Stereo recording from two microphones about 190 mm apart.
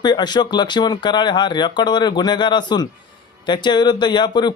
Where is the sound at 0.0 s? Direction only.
25° left (ahead or behind).